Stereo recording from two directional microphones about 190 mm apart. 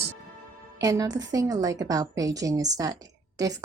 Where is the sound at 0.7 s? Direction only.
15° right (ahead or behind).